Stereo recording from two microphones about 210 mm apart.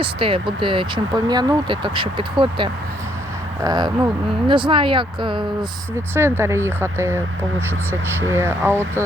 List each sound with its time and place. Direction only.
0.0 s speech: 25° right (ahead or behind)
6.1 s speech: 10° right (ahead or behind)
8.3 s speech: 10° right (ahead or behind)